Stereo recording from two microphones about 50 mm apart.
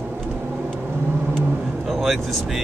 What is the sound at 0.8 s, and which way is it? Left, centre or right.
Vehicle, right.